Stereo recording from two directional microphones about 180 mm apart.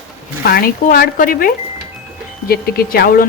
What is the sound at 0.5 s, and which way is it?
Speech, 55° left (ahead or behind).